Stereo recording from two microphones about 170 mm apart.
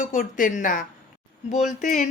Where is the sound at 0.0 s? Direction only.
50° left (ahead or behind).